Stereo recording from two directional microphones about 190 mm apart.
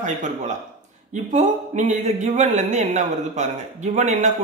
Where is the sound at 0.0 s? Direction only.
40° right (ahead or behind).